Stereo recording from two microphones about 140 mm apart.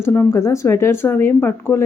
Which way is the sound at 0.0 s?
15° left (ahead or behind).